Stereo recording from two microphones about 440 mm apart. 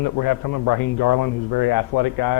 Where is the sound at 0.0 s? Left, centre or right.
Left.